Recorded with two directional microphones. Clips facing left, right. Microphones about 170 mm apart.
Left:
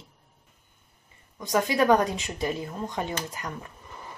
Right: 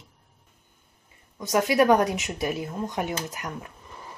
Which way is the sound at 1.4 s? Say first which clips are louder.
Right 2 dB; 15° right (ahead or behind).